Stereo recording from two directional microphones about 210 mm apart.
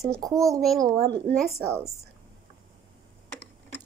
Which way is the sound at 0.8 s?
15° right (ahead or behind).